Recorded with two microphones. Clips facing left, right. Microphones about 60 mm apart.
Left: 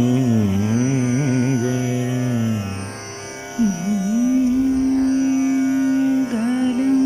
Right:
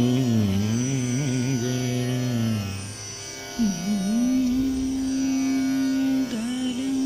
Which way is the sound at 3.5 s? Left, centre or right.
Left.